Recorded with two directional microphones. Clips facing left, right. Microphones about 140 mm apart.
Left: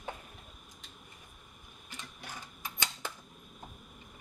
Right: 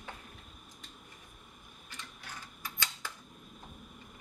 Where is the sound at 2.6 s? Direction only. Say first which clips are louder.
Left 2 dB; 20° left (ahead or behind).